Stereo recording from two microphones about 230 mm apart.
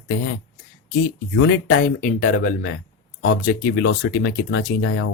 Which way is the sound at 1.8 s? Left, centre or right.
Left.